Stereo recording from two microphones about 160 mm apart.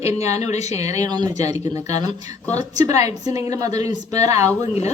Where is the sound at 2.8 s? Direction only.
20° right (ahead or behind).